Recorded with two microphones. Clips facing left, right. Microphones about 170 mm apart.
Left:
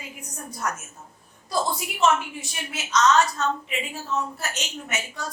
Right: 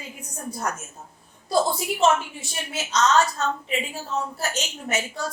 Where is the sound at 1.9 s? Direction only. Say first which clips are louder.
Right 1 dB; 30° right (ahead or behind).